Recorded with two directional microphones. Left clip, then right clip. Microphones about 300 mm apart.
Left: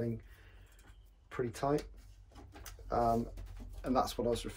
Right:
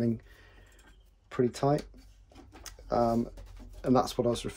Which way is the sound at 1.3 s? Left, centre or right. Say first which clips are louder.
Right 7 dB; right.